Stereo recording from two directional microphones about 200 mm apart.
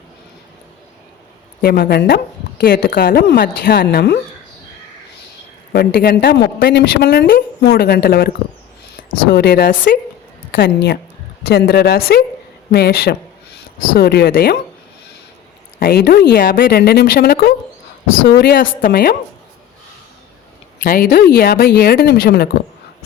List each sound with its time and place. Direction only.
1.6 s speech: 45° left (ahead or behind)
5.7 s speech: 55° left (ahead or behind)
9.0 s a sound: 45° left (ahead or behind)
9.3 s speech: 55° left (ahead or behind)
15.8 s speech: 50° left (ahead or behind)
20.8 s speech: 50° left (ahead or behind)